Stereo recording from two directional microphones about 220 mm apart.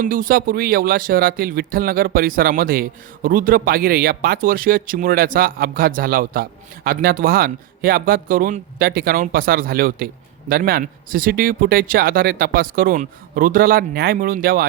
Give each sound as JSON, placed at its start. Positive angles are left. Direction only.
{"t": 0.0, "sound": "speech", "side_deg": -40}